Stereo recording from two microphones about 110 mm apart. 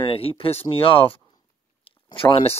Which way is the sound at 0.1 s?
60° left (ahead or behind).